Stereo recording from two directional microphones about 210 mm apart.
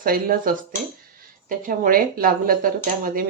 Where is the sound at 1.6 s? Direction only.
40° right (ahead or behind).